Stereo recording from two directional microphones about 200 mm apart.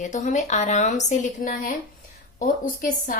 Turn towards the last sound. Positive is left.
turn(degrees=40)  # may be behind; listen again after turning